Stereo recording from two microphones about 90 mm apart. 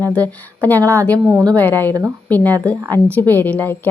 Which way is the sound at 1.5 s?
20° left (ahead or behind).